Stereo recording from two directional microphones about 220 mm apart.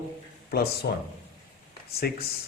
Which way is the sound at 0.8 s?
50° left (ahead or behind).